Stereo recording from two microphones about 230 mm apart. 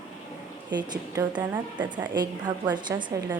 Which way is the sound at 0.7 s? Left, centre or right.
Centre.